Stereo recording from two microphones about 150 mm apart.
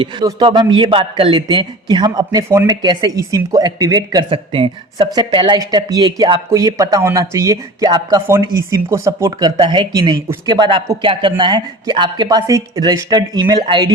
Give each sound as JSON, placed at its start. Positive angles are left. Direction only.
{"t": 0.0, "sound": "a man's voice", "side_deg": -30}